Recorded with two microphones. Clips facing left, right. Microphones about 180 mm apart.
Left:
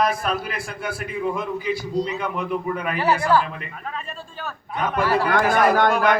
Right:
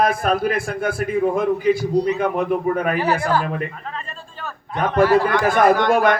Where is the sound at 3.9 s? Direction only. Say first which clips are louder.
Even; 5° left (ahead or behind).